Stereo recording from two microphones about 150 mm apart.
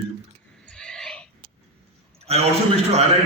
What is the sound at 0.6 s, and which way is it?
Owl, 5° left (ahead or behind).